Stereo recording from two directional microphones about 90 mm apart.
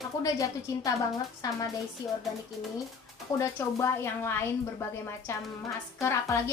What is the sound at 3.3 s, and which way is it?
Speech, 35° left (ahead or behind).